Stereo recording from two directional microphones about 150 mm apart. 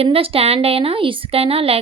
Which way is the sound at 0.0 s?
40° right (ahead or behind).